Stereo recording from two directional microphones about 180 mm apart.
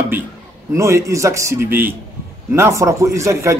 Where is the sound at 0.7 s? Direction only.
15° right (ahead or behind).